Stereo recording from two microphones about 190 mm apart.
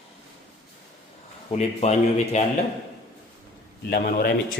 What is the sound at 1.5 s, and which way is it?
Speech, 35° left (ahead or behind).